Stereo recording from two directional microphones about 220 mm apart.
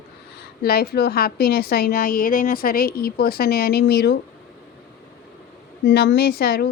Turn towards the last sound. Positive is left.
turn(degrees=45)  # may be behind; listen again after turning